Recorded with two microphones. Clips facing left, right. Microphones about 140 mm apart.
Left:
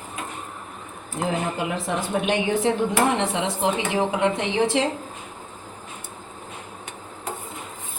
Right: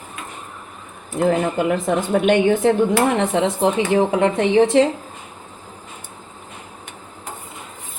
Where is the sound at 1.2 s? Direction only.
55° right (ahead or behind).